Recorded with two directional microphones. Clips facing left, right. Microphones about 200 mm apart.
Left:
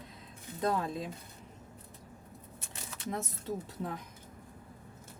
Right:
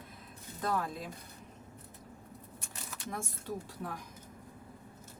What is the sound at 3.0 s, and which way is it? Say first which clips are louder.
Speech: left 4 dB; 20° left (ahead or behind).